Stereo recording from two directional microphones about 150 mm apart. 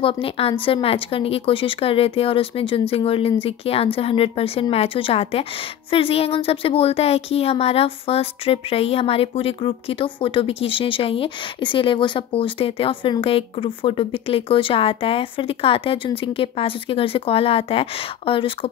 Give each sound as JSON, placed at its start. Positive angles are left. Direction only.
{"t": 0.0, "sound": "speech", "side_deg": 40}